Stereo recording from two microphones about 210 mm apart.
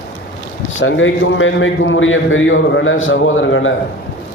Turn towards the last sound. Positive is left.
turn(degrees=65)  # may be behind; listen again after turning